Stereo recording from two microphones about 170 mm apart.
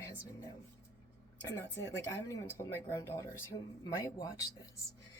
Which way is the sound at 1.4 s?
20° left (ahead or behind).